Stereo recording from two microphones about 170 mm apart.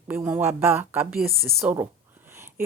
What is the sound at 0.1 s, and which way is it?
Speech, 10° right (ahead or behind).